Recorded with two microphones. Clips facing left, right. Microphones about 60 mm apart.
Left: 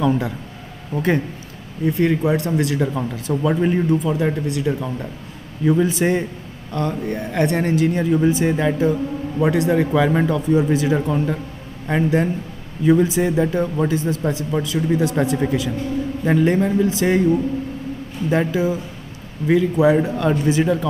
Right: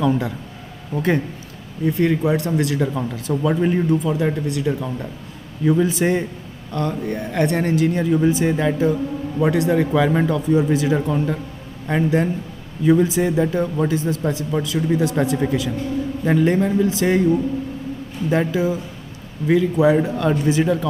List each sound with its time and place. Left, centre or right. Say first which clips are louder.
0.0 s a man's voice: even; centre